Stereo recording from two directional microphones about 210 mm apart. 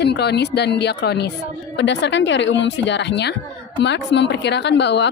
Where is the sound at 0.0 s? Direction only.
50° left (ahead or behind).